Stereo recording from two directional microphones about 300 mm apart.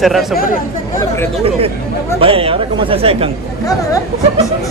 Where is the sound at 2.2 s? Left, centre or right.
Centre.